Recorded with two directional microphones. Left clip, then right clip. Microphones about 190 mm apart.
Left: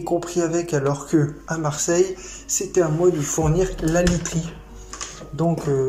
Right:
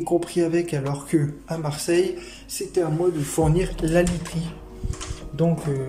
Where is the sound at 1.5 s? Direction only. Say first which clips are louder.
Left 2 dB; 10° right (ahead or behind).